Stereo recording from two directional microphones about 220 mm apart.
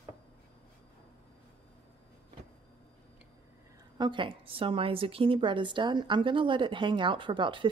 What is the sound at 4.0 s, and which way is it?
A woman's voice, 20° right (ahead or behind).